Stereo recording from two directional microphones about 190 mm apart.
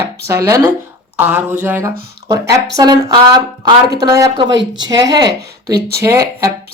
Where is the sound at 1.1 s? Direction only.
10° right (ahead or behind).